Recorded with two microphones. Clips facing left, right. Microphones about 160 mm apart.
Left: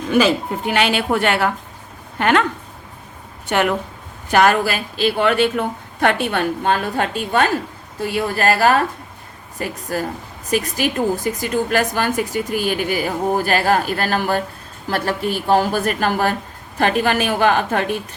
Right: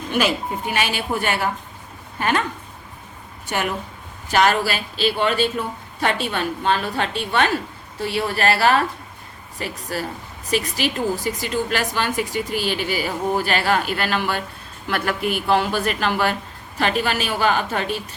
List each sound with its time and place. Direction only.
0.7 s a woman's voice: 65° left (ahead or behind)
3.5 s a woman's voice: 60° left (ahead or behind)